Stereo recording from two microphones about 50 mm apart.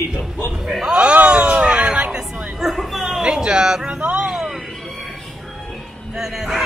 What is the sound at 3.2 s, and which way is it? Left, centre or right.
Speech, centre.